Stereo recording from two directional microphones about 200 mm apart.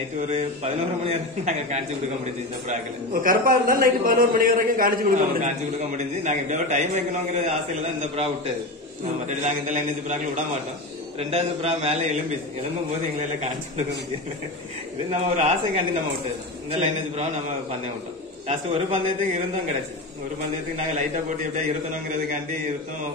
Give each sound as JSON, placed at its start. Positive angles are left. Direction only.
{"t": 0.3, "sound": "a man's voice", "side_deg": -35}
{"t": 9.3, "sound": "a man's voice", "side_deg": -35}
{"t": 15.0, "sound": "a man's voice", "side_deg": -35}
{"t": 18.5, "sound": "a man's voice", "side_deg": -35}
{"t": 20.7, "sound": "a man's voice", "side_deg": -35}